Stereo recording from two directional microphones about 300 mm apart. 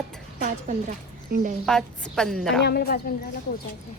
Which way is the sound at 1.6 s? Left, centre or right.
Centre.